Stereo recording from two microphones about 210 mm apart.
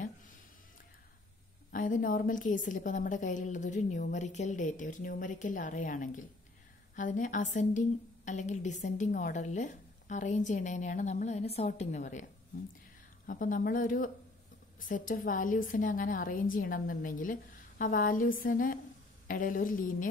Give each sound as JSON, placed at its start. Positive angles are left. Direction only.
{"t": 1.7, "sound": "a woman's voice", "side_deg": 40}
{"t": 13.3, "sound": "a woman's voice", "side_deg": 40}